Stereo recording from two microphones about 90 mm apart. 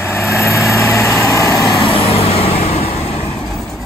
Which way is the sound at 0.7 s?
35° left (ahead or behind).